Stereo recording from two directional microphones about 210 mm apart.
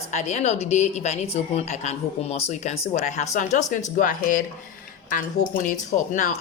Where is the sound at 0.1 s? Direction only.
35° left (ahead or behind).